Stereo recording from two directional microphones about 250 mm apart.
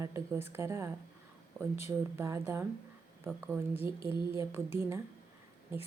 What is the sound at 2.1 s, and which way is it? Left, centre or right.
Speech, centre.